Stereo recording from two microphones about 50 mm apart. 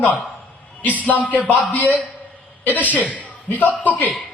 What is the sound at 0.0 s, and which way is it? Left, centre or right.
Speech, left.